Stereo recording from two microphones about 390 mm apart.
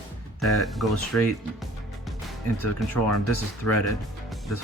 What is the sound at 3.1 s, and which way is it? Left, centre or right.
Speech, left.